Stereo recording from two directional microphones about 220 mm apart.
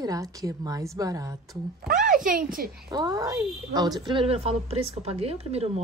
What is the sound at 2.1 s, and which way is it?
Speech, 40° right (ahead or behind).